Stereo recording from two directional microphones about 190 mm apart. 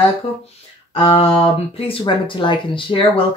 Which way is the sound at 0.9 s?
30° left (ahead or behind).